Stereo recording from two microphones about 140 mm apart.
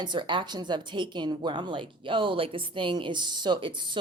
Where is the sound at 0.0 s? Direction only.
35° right (ahead or behind).